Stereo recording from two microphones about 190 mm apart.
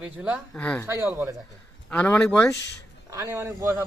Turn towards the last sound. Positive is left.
turn(degrees=-10)  # may be behind; listen again after turning